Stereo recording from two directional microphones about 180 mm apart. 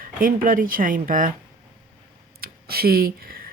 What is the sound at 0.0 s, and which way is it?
Speech, 50° right (ahead or behind).